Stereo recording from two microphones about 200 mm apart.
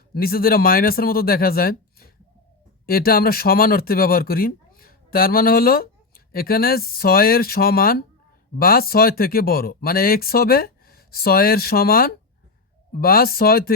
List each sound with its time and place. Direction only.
0.1 s speech: 50° left (ahead or behind)